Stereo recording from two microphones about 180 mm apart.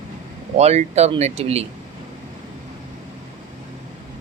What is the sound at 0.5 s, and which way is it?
Speech, 35° right (ahead or behind).